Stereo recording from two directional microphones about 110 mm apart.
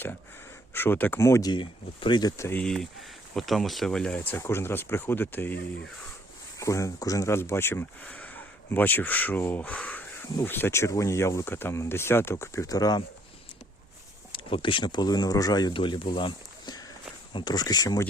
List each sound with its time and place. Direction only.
0.7 s speech: 20° left (ahead or behind)
1.5 s speech: 45° left (ahead or behind)
2.4 s speech: 20° left (ahead or behind)
3.3 s speech: centre (ahead or behind)
4.3 s speech: 20° left (ahead or behind)
6.6 s speech: 30° left (ahead or behind)
14.3 s speech: 50° left (ahead or behind); by 15.7 s 35° left (ahead or behind)
15.7 s speech: 50° left (ahead or behind); by 18.0 s 35° left (ahead or behind)